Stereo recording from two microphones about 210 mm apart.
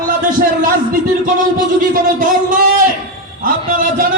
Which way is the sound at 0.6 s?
40° right (ahead or behind).